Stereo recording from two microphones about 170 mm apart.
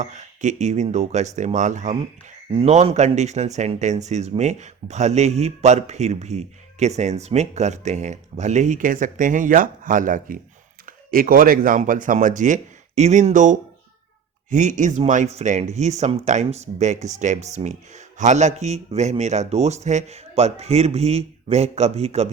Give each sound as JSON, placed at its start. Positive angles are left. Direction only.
{"t": 0.0, "sound": "speech", "side_deg": -45}